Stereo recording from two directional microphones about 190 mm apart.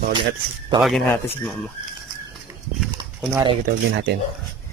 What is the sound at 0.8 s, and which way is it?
Speech, centre (ahead or behind).